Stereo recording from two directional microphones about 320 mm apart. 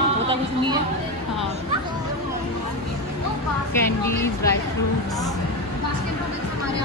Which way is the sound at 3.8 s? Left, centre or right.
Centre.